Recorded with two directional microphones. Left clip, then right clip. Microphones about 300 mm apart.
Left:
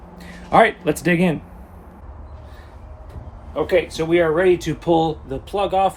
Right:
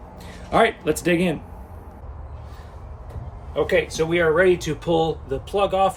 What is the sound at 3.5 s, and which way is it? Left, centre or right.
Speech, centre.